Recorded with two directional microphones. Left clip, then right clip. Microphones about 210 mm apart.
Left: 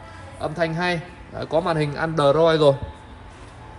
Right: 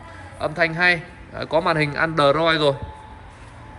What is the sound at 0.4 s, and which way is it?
A man's voice, 15° left (ahead or behind).